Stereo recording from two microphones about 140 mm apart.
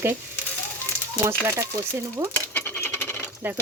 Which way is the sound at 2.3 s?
10° left (ahead or behind).